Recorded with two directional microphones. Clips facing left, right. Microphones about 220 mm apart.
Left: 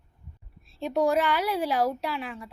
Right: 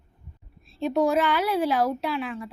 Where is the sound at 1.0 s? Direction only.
10° left (ahead or behind).